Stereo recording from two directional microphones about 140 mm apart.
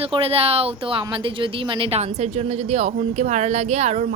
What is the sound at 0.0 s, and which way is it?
A woman's voice, 45° right (ahead or behind).